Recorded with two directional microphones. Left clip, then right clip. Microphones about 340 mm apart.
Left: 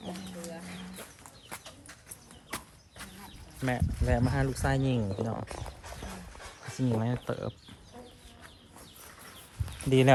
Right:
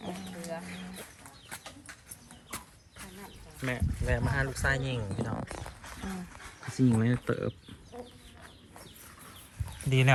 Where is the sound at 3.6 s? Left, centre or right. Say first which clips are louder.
Left 2 dB; left.